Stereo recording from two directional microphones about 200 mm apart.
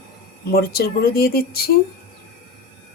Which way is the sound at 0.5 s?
50° left (ahead or behind).